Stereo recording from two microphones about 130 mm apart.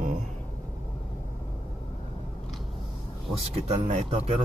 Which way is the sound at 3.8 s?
55° right (ahead or behind).